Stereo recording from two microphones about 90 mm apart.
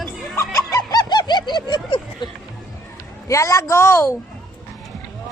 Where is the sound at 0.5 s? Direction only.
40° left (ahead or behind); by 2.2 s 60° left (ahead or behind).